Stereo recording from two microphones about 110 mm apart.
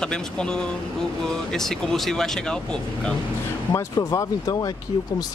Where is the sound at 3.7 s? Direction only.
35° left (ahead or behind).